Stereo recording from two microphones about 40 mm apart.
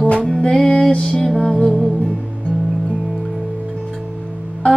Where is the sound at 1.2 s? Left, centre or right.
Centre.